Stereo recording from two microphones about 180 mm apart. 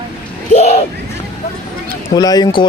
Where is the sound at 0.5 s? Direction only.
35° left (ahead or behind).